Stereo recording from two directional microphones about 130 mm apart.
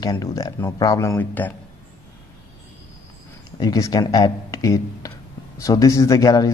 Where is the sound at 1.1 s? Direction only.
15° left (ahead or behind).